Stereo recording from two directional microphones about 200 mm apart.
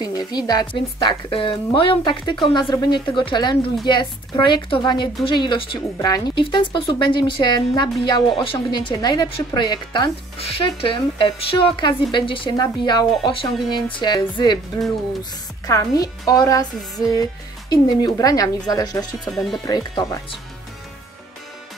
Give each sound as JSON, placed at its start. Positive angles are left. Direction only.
{"t": 0.0, "sound": "speech", "side_deg": 20}
{"t": 15.6, "sound": "a woman's voice", "side_deg": 15}
{"t": 19.2, "sound": "speech", "side_deg": 0}
{"t": 19.6, "sound": "speech", "side_deg": 20}